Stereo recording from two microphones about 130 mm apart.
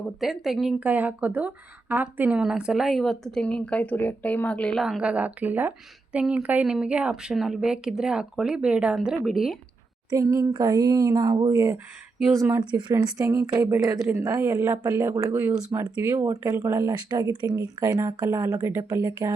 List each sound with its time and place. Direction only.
0.2 s speech: centre (ahead or behind)
4.8 s speech: 5° right (ahead or behind)
10.1 s speech: 25° right (ahead or behind)